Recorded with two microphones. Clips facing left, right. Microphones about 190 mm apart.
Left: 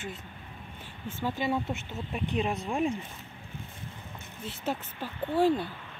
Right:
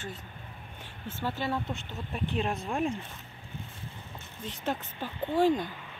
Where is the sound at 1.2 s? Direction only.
15° left (ahead or behind).